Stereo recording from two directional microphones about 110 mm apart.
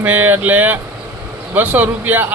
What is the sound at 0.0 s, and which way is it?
A man's voice, 15° right (ahead or behind).